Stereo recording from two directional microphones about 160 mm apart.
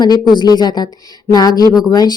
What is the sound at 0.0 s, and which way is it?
Speech, 25° left (ahead or behind).